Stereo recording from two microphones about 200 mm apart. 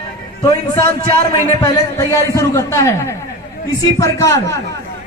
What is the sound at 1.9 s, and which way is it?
A man's voice, 15° left (ahead or behind).